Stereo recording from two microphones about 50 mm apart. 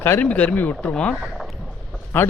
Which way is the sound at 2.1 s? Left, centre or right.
Left.